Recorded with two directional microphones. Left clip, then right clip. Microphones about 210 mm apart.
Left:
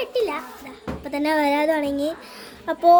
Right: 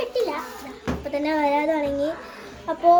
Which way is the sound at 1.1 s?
55° left (ahead or behind).